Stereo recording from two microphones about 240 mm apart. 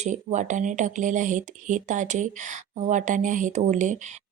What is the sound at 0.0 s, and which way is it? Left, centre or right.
Speech, right.